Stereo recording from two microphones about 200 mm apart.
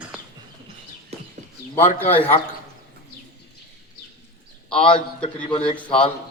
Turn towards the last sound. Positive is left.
turn(degrees=25)  # may be behind; listen again after turning